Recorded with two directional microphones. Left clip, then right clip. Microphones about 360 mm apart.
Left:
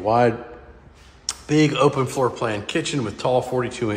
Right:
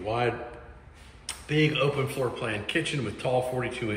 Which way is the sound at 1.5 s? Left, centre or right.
Centre.